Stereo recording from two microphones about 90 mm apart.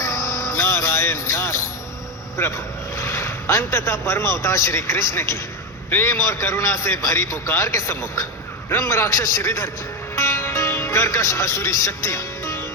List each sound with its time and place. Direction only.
0.0 s music: 35° left (ahead or behind)
2.4 s speech: 30° left (ahead or behind)
10.2 s music: 30° left (ahead or behind)